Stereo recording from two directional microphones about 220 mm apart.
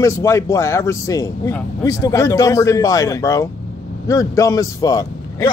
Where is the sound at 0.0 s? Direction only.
15° left (ahead or behind).